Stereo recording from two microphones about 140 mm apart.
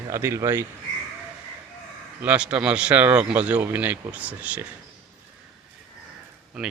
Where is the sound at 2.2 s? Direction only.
10° right (ahead or behind).